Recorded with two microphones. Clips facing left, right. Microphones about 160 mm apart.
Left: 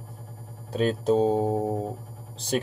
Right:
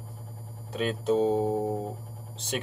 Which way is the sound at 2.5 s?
40° left (ahead or behind).